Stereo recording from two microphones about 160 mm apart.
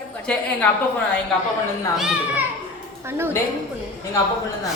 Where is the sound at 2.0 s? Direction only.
5° right (ahead or behind).